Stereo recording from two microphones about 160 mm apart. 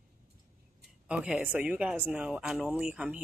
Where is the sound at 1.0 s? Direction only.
5° right (ahead or behind).